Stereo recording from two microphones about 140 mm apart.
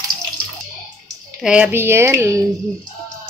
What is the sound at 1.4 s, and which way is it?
Speech, 5° right (ahead or behind).